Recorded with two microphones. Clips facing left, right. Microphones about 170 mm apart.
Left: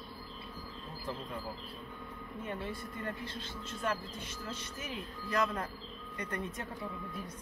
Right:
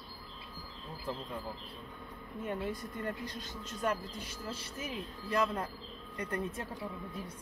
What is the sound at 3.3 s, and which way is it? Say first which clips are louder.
Speech: even; 40° right (ahead or behind).